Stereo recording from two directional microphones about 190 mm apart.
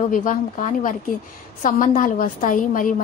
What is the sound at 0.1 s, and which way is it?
A woman's voice, 45° left (ahead or behind).